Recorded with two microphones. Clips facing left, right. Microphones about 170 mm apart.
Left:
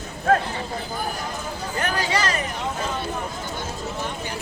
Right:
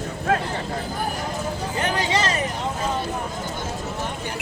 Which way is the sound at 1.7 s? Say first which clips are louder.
Right 1 dB; 20° right (ahead or behind).